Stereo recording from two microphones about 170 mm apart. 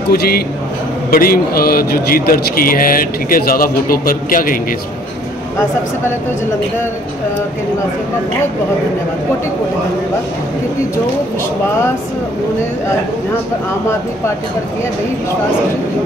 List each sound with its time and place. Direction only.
0.1 s a man's voice: 65° left (ahead or behind)